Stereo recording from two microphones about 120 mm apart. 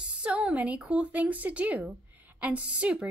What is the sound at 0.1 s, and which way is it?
Speech, 10° right (ahead or behind).